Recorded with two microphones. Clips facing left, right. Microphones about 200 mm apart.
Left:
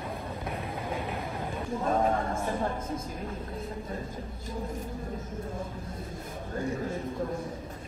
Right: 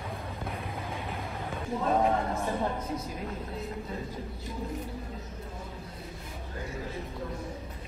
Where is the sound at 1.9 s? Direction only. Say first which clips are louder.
Right 1 dB; 20° right (ahead or behind).